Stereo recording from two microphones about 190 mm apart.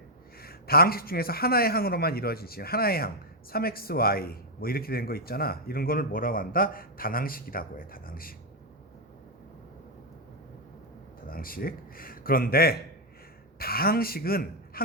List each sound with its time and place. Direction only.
0.4 s a man's voice: 50° left (ahead or behind)
11.3 s a man's voice: 50° left (ahead or behind)